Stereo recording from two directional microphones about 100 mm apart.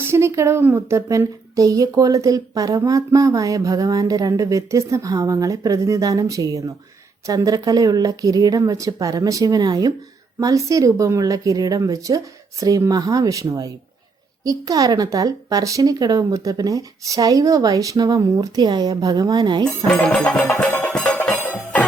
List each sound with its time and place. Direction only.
0.0 s a woman's voice: 25° right (ahead or behind); by 19.6 s 45° right (ahead or behind)
19.6 s speech: 10° left (ahead or behind)
20.9 s music: 10° left (ahead or behind)